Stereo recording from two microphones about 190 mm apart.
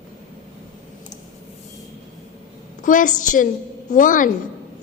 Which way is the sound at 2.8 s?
45° left (ahead or behind).